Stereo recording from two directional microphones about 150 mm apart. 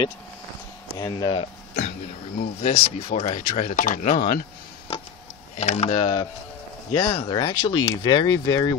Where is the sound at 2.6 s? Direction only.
45° left (ahead or behind).